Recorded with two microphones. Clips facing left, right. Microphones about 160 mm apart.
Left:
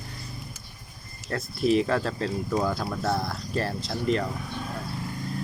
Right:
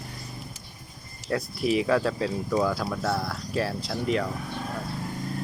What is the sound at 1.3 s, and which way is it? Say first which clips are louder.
Speech: left 1 dB; 10° right (ahead or behind).